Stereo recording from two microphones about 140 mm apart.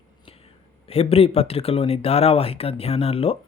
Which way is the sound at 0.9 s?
45° left (ahead or behind).